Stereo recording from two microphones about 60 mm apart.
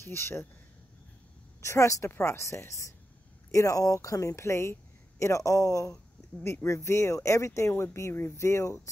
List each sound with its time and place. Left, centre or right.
0.1 s speech: left
1.6 s speech: left
2.0 s speech: left
6.4 s speech: left